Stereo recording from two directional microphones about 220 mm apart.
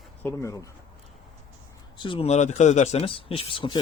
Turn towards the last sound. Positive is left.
turn(degrees=25)  # may be behind; listen again after turning